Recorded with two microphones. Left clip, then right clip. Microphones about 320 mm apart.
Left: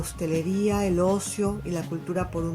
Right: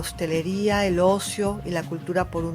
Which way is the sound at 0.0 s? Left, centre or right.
Right.